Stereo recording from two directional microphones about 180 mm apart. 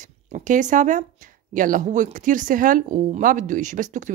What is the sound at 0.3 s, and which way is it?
Speech, 45° right (ahead or behind).